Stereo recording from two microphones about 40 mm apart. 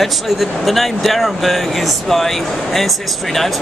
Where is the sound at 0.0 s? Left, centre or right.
Centre.